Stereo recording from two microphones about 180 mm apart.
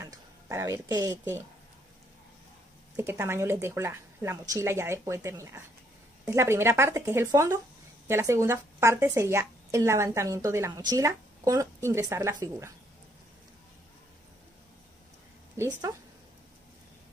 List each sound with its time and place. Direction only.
0.0 s speech: 15° right (ahead or behind)
3.0 s a woman's voice: 15° right (ahead or behind)
15.5 s a woman's voice: 15° right (ahead or behind)